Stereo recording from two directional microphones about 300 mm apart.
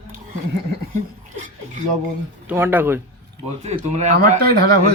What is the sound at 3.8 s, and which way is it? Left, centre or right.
Speech, right.